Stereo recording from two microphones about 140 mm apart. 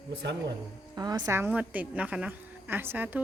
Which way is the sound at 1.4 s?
10° right (ahead or behind).